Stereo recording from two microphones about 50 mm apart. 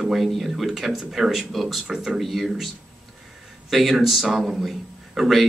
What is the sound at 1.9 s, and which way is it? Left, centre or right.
Speech, centre.